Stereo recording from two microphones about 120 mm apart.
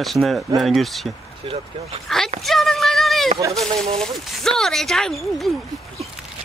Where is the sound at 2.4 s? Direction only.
Centre (ahead or behind).